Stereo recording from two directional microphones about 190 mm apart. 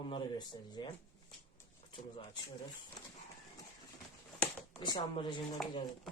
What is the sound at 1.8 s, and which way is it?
Pigeon, 25° left (ahead or behind).